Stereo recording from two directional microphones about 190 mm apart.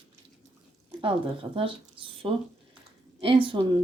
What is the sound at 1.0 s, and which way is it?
Speech, 30° right (ahead or behind).